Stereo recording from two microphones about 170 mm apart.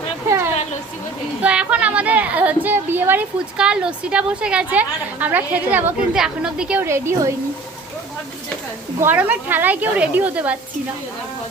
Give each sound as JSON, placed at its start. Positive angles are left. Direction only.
{"t": 0.3, "sound": "a sound", "side_deg": -15}
{"t": 1.4, "sound": "a woman's voice", "side_deg": -5}
{"t": 9.0, "sound": "a woman's voice", "side_deg": -10}